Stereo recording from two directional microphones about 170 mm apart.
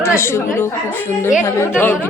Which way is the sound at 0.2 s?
15° left (ahead or behind).